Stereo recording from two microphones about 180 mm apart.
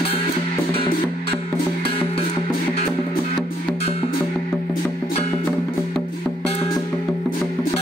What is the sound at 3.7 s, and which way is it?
Music, 35° left (ahead or behind).